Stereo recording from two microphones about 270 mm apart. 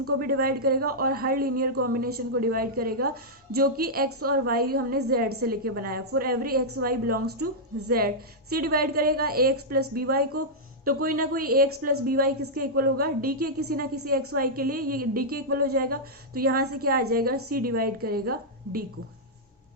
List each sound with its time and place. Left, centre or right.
0.2 s a woman's voice: right